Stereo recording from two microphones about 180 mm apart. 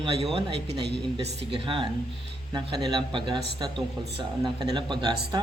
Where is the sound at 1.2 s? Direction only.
30° right (ahead or behind).